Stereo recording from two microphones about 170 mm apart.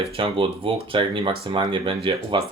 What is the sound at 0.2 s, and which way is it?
Speech, 30° right (ahead or behind).